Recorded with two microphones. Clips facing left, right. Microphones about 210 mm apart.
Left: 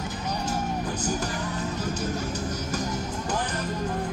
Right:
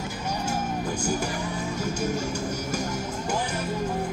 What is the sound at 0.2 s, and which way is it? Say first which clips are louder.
Music: right 1 dB; 10° right (ahead or behind).